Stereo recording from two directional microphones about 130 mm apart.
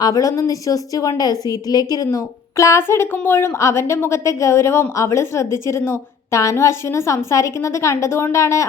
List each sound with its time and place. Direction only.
0.0 s a woman's voice: 25° left (ahead or behind)